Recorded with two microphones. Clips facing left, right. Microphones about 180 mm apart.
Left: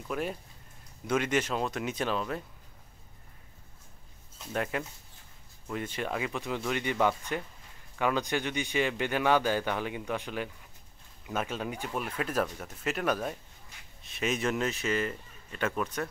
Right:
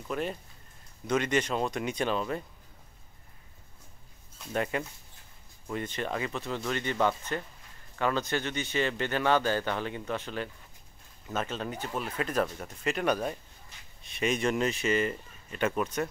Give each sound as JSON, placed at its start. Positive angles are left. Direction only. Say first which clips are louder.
{"t": 0.1, "sound": "speech", "louder": "right 1 dB", "side_deg": 5}
{"t": 4.5, "sound": "a man's voice", "louder": "right 2 dB", "side_deg": 0}